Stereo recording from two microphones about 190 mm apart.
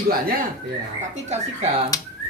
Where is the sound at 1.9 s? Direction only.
20° left (ahead or behind).